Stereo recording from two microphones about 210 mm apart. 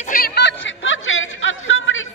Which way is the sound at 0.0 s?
40° left (ahead or behind).